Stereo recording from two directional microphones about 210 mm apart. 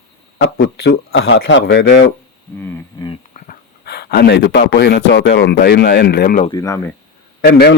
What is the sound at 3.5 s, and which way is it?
Speech, 50° left (ahead or behind).